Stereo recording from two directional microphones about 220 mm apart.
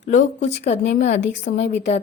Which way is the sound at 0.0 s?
35° left (ahead or behind).